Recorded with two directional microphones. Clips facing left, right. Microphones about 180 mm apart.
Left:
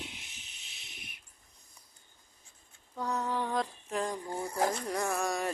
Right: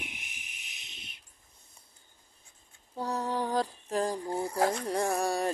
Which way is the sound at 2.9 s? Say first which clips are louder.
Right 2 dB; 35° right (ahead or behind).